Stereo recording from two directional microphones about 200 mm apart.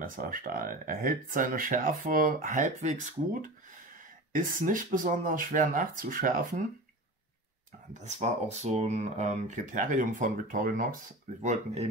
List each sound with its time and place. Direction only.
0.0 s speech: 45° right (ahead or behind)
4.3 s speech: 40° right (ahead or behind)
7.9 s speech: 35° right (ahead or behind)
11.4 s speech: 30° right (ahead or behind)